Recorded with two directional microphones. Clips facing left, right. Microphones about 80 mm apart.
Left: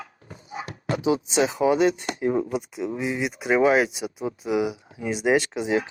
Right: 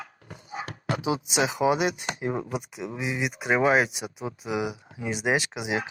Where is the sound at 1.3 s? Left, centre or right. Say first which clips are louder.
Left 1 dB; centre.